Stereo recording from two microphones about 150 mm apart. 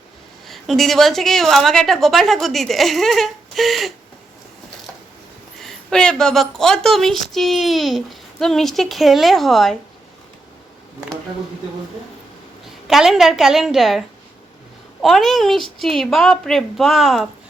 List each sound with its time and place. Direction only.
0.4 s a woman's voice: centre (ahead or behind)
5.5 s a woman's voice: 5° left (ahead or behind)
12.9 s a woman's voice: centre (ahead or behind)
15.0 s a woman's voice: centre (ahead or behind)